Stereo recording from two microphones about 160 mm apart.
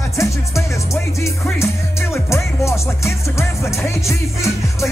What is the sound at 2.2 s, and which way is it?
Music, 15° left (ahead or behind).